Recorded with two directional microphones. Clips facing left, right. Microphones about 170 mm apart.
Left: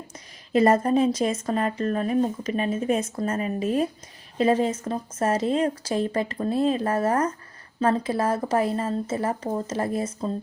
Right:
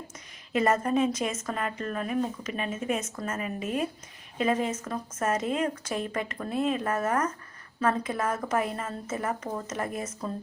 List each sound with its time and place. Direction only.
0.5 s speech: 35° left (ahead or behind)